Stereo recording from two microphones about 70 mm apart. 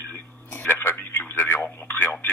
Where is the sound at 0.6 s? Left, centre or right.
Left.